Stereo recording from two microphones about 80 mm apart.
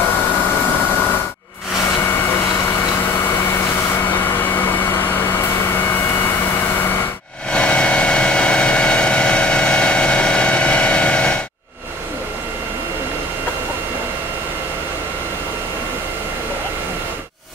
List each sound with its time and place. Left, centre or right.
4.1 s vacuum cleaner: left
7.5 s vehicle: centre